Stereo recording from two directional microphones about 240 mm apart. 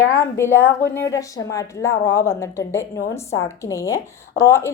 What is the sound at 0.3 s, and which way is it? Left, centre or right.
A woman's voice, centre.